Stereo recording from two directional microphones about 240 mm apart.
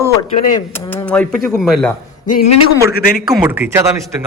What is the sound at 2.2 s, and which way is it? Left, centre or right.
Speech, left.